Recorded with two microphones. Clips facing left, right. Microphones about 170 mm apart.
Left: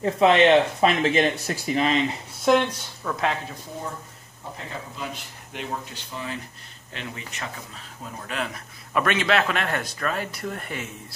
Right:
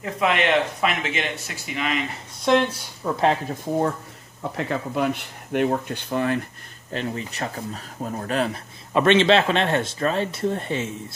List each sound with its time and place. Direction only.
0.0 s speech: 30° left (ahead or behind)
2.4 s speech: centre (ahead or behind)
3.0 s speech: 20° right (ahead or behind)
4.4 s speech: 75° right (ahead or behind)
6.9 s speech: 35° right (ahead or behind)
8.9 s speech: 25° right (ahead or behind)